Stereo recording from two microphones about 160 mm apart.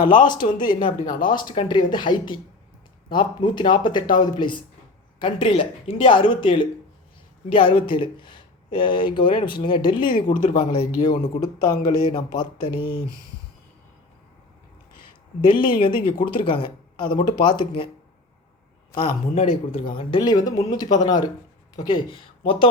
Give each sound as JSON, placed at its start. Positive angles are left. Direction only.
{"t": 0.0, "sound": "speech", "side_deg": 55}
{"t": 0.6, "sound": "speech", "side_deg": 30}
{"t": 10.2, "sound": "speech", "side_deg": 50}
{"t": 11.3, "sound": "speech", "side_deg": 25}
{"t": 12.7, "sound": "speech", "side_deg": 75}
{"t": 15.4, "sound": "speech", "side_deg": 30}
{"t": 19.3, "sound": "speech", "side_deg": 40}